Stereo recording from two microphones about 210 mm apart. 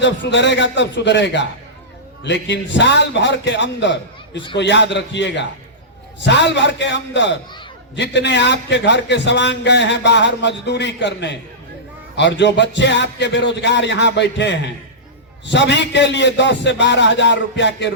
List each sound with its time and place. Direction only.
0.0 s a man's voice: 55° left (ahead or behind)